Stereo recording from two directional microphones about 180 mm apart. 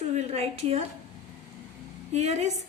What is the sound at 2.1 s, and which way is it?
Speech, 40° right (ahead or behind).